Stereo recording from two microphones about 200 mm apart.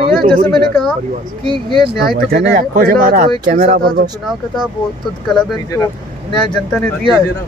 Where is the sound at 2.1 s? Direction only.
50° right (ahead or behind).